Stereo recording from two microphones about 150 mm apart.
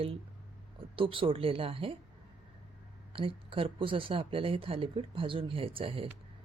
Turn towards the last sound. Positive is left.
turn(degrees=-40)  # may be behind; listen again after turning